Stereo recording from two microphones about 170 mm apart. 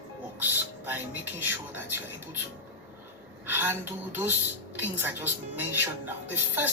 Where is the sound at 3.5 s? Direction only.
10° right (ahead or behind).